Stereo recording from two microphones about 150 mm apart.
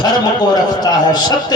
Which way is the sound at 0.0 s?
25° left (ahead or behind).